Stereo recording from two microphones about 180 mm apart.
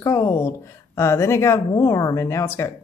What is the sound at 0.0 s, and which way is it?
Speech, 15° left (ahead or behind).